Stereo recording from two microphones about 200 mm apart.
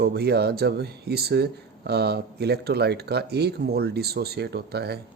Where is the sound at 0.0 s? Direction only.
55° right (ahead or behind).